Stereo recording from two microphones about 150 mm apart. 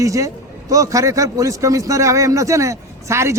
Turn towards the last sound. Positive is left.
turn(degrees=-20)  # may be behind; listen again after turning